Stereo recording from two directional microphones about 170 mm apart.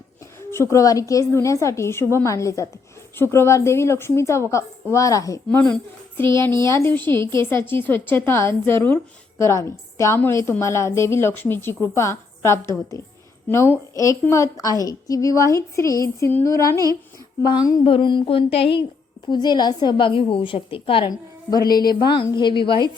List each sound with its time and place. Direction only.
0.5 s a woman's voice: 15° left (ahead or behind)